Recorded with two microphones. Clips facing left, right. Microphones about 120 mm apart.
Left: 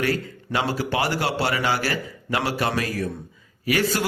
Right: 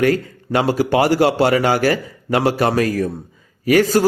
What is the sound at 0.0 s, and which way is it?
A man's voice, 45° right (ahead or behind).